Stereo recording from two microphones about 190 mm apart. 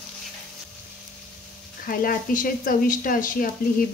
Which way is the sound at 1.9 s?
45° left (ahead or behind).